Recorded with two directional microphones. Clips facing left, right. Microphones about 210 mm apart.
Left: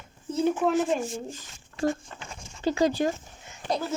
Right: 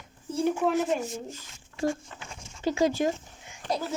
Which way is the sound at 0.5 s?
30° left (ahead or behind).